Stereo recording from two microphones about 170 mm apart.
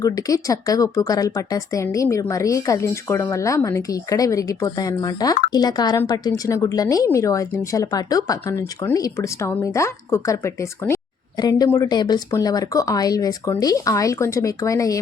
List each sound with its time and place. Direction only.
0.0 s speech: 20° left (ahead or behind)